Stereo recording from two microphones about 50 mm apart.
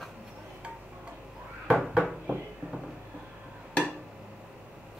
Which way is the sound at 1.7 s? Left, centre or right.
Centre.